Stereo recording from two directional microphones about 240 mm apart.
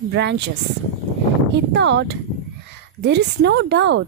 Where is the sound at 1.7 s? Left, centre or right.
Right.